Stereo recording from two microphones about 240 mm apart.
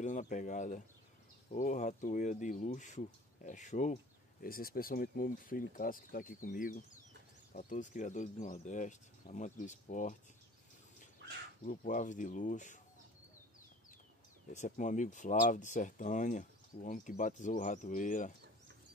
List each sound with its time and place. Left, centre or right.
0.0 s speech: left
11.2 s bird: right
11.6 s speech: left
14.5 s speech: left